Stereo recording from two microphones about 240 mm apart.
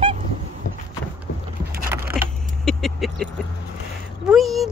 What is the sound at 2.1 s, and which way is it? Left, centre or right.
Vehicle, centre.